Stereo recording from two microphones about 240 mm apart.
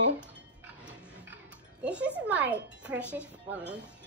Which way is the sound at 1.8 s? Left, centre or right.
Centre.